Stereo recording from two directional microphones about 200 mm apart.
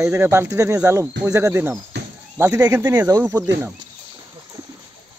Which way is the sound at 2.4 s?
15° right (ahead or behind).